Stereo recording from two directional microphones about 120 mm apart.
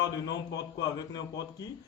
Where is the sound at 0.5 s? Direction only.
30° left (ahead or behind).